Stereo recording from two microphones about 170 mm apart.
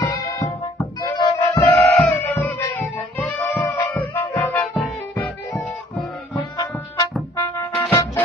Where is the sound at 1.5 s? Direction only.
10° left (ahead or behind).